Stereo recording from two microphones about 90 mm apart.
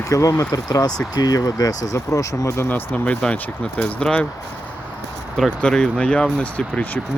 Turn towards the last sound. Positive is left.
turn(degrees=15)  # may be behind; listen again after turning